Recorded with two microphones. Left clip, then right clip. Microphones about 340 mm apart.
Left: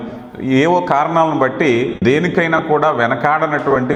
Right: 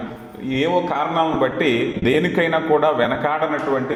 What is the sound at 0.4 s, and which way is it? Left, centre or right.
A man's voice, left.